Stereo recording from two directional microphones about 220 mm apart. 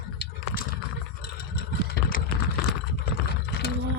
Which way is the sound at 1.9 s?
40° left (ahead or behind).